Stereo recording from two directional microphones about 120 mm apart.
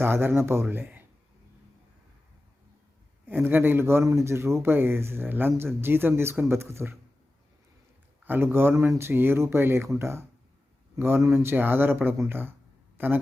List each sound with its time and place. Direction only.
0.0 s speech: 20° right (ahead or behind)
3.2 s speech: 15° right (ahead or behind)
8.2 s a man's voice: 15° right (ahead or behind)